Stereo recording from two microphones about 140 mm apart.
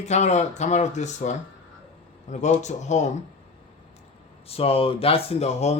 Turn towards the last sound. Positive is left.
turn(degrees=50)  # may be behind; listen again after turning